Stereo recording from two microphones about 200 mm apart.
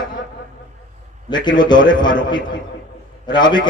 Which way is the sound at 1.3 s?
20° left (ahead or behind).